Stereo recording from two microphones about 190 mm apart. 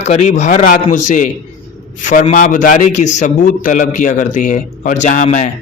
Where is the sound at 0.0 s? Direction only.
35° left (ahead or behind).